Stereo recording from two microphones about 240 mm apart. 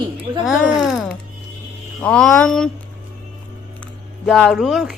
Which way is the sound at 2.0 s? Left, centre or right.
Centre.